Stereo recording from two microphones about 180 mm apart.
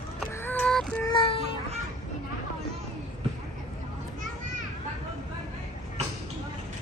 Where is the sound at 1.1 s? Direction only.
30° left (ahead or behind).